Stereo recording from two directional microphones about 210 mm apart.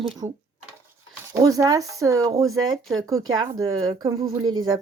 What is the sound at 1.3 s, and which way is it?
Speech, 15° right (ahead or behind).